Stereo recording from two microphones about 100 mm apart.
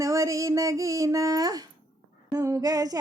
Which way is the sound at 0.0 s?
30° right (ahead or behind).